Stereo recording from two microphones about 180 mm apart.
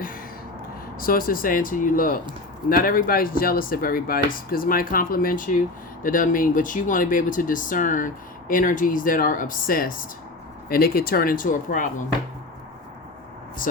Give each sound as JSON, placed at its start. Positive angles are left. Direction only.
{"t": 0.9, "sound": "speech", "side_deg": 55}